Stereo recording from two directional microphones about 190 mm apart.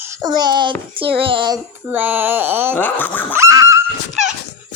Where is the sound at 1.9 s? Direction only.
10° right (ahead or behind).